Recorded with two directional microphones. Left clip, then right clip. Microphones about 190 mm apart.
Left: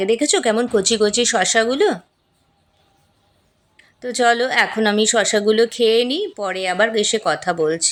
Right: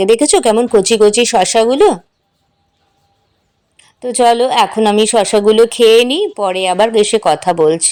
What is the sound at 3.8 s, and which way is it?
A woman's voice, 20° right (ahead or behind).